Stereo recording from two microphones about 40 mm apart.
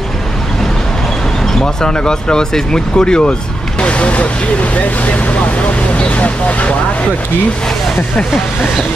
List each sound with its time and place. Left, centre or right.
1.6 s speech: centre; by 6.7 s left